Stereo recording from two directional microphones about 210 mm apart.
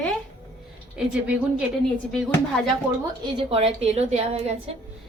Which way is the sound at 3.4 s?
25° right (ahead or behind).